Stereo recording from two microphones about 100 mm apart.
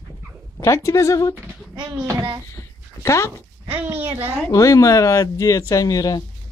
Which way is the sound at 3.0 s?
30° left (ahead or behind).